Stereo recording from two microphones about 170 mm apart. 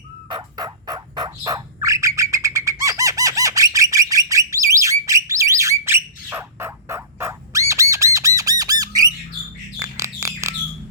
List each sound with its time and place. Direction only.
0.3 s turkey: 25° right (ahead or behind)
9.7 s bird: 20° right (ahead or behind)